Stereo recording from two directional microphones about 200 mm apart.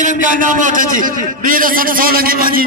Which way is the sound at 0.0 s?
40° right (ahead or behind).